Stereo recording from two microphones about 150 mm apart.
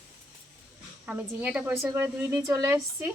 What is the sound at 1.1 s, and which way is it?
Speech, 10° right (ahead or behind).